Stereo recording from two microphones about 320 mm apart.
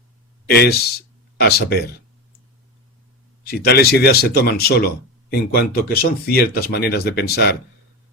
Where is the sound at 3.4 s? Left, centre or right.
Left.